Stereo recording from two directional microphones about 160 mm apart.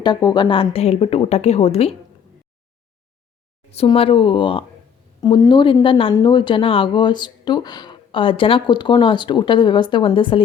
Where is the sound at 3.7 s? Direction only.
35° left (ahead or behind).